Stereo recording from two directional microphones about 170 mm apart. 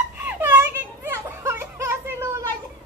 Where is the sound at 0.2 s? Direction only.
10° right (ahead or behind).